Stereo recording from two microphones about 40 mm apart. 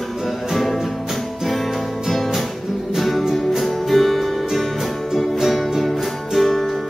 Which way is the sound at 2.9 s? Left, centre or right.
Centre.